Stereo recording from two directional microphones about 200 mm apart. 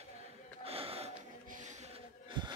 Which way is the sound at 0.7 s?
30° right (ahead or behind).